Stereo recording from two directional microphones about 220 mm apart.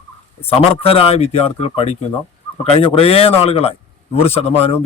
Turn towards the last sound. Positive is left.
turn(degrees=30)  # may be behind; listen again after turning